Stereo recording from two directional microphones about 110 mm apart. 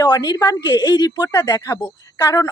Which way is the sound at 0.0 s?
35° left (ahead or behind).